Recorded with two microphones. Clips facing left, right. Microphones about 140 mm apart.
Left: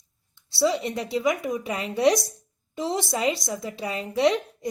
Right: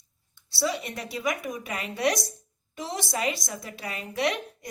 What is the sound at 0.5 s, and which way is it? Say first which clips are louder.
A woman's voice: left 6 dB; 25° left (ahead or behind).